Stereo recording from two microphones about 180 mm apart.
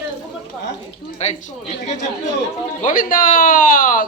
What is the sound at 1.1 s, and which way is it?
Speech, 40° left (ahead or behind).